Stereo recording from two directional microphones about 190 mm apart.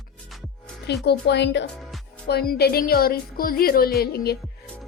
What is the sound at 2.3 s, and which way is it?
A woman's voice, 55° left (ahead or behind).